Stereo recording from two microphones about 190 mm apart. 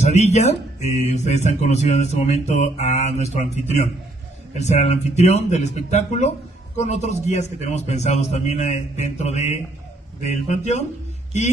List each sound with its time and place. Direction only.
0.0 s speech: 35° left (ahead or behind)